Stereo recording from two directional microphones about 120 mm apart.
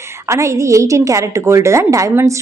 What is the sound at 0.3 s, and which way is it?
A woman's voice, 25° right (ahead or behind).